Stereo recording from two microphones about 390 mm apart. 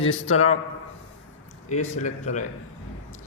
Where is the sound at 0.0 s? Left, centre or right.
Left.